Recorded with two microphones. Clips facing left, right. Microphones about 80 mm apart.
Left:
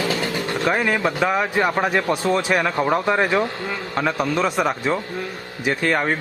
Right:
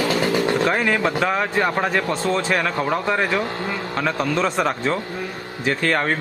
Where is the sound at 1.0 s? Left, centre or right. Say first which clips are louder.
Even; centre.